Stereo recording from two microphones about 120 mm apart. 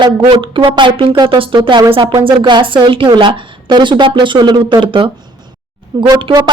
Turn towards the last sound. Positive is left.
turn(degrees=-40)  # may be behind; listen again after turning